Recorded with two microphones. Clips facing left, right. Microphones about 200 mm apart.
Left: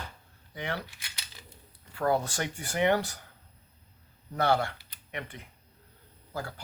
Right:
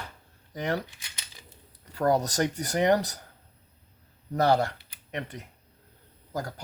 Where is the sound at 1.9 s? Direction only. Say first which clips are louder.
Right 4 dB; 40° right (ahead or behind).